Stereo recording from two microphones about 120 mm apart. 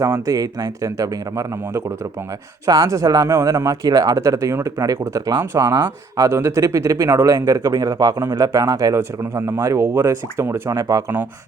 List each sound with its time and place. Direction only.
0.0 s speech: 30° right (ahead or behind)